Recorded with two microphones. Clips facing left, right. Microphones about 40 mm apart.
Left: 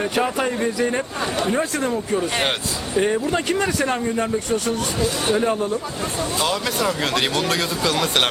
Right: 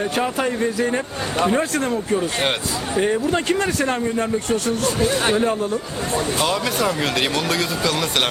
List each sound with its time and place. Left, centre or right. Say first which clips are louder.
0.2 s speech: even; centre
3.0 s speech: even; centre
4.4 s speech: right 2 dB; right
6.4 s speech: left 1 dB; centre